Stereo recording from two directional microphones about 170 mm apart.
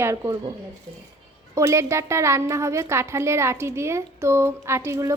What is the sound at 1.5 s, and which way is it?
A woman's voice, 15° right (ahead or behind).